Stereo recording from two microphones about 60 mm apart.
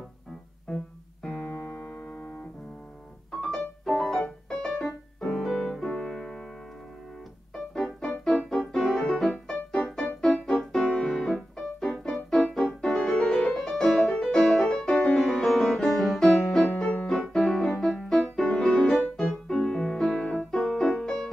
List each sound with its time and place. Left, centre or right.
0.7 s music: centre
1.4 s music: centre
3.3 s music: centre
7.5 s music: centre
8.1 s keyboard: centre
8.5 s keyboard: centre
9.8 s music: centre
12.1 s piano: centre
13.5 s music: centre